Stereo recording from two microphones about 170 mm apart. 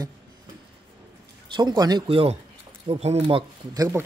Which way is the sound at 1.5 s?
25° right (ahead or behind).